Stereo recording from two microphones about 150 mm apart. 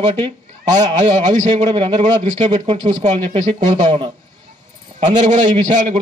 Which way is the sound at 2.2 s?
50° right (ahead or behind).